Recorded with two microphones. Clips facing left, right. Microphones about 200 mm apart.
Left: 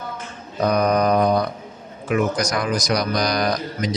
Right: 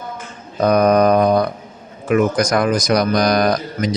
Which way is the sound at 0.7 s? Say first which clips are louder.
Right 5 dB; 55° right (ahead or behind).